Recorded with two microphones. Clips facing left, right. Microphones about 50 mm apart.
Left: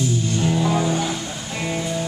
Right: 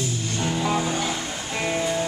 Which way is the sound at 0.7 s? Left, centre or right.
Centre.